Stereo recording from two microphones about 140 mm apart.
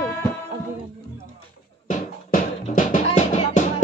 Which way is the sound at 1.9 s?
70° left (ahead or behind).